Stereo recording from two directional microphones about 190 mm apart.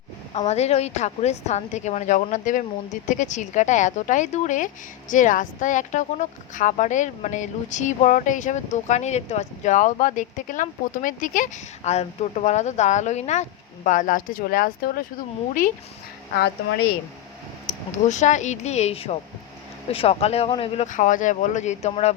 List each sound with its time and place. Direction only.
0.3 s a woman's voice: 35° left (ahead or behind)
16.3 s speech: 60° left (ahead or behind)
17.7 s a woman's voice: 40° left (ahead or behind)